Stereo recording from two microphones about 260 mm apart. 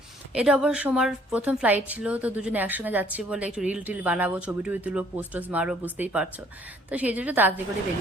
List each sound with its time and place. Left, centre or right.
0.3 s a woman's voice: centre